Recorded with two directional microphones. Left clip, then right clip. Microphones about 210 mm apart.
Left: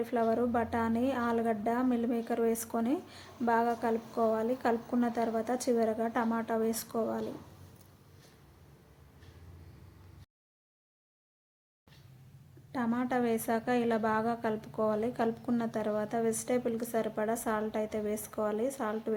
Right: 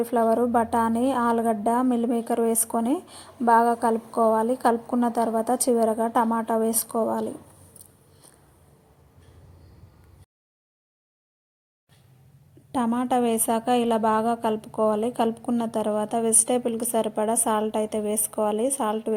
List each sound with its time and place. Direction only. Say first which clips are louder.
0.0 s a woman's voice: right 8 dB; 20° right (ahead or behind)
12.7 s a woman's voice: right 9 dB; 25° right (ahead or behind)